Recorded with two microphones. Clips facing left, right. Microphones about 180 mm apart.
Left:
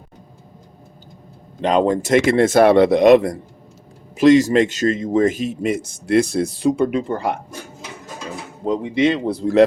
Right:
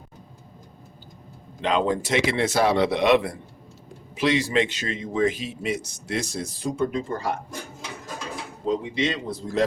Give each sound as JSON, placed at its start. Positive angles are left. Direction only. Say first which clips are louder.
{"t": 1.6, "sound": "a man's voice", "louder": "left 6 dB", "side_deg": 45}
{"t": 8.6, "sound": "a man's voice", "louder": "left 7 dB", "side_deg": 60}